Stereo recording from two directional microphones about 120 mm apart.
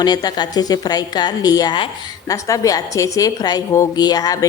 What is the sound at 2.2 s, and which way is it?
A woman's voice, 25° left (ahead or behind).